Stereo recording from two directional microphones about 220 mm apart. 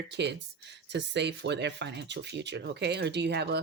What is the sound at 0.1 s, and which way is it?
Speech, 50° right (ahead or behind).